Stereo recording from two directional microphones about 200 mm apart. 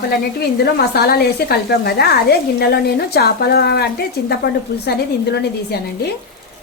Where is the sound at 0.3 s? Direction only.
55° left (ahead or behind).